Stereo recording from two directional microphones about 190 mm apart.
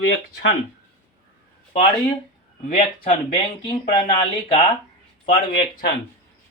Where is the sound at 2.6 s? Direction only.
45° left (ahead or behind).